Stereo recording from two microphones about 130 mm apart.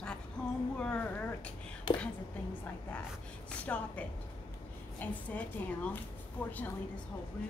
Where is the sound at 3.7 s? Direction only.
10° left (ahead or behind).